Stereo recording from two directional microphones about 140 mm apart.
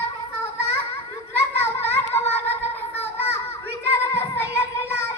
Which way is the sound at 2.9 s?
15° left (ahead or behind).